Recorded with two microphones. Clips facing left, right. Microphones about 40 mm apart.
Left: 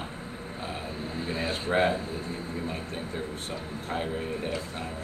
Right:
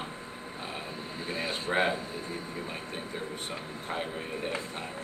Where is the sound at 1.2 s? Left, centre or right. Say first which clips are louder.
Left 2 dB; centre.